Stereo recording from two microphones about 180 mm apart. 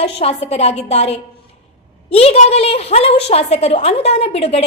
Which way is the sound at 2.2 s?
35° left (ahead or behind).